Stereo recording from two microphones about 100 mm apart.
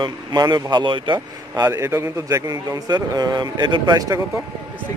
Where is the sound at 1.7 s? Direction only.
30° right (ahead or behind).